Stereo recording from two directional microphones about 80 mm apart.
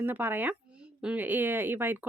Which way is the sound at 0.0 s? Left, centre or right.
Right.